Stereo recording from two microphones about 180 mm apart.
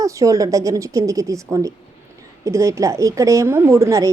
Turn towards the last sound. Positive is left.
turn(degrees=-15)  # may be behind; listen again after turning